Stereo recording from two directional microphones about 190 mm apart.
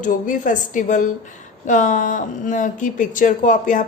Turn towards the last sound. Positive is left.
turn(degrees=45)  # may be behind; listen again after turning